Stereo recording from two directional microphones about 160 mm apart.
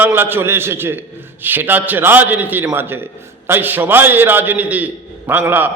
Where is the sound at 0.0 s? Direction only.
15° right (ahead or behind).